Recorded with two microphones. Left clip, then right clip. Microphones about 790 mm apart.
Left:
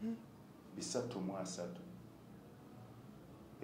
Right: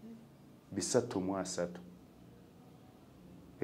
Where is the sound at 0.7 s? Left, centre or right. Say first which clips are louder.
Right 9 dB; right.